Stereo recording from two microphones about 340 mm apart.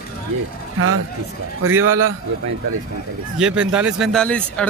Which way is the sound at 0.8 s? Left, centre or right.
Right.